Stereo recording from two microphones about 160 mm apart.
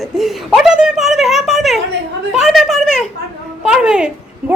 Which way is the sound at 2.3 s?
Centre (ahead or behind).